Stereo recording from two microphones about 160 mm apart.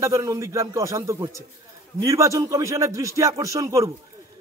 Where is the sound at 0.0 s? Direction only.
20° right (ahead or behind).